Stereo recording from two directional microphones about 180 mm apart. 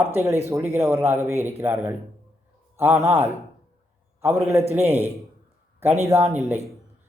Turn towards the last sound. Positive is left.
turn(degrees=-10)  # may be behind; listen again after turning